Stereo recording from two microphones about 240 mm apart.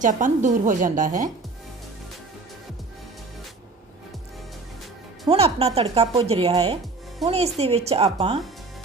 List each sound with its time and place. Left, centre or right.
0.0 s a woman's voice: right
5.3 s speech: right